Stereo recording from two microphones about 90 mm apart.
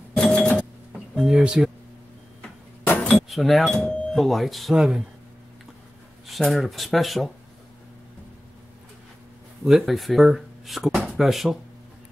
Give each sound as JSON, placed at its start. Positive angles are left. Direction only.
{"t": 0.1, "sound": "a sound", "side_deg": 10}
{"t": 0.9, "sound": "speech", "side_deg": -5}
{"t": 2.8, "sound": "a sound", "side_deg": 15}
{"t": 3.3, "sound": "speech", "side_deg": 0}
{"t": 4.1, "sound": "speech", "side_deg": 0}
{"t": 6.2, "sound": "speech", "side_deg": 0}
{"t": 9.7, "sound": "speech", "side_deg": 0}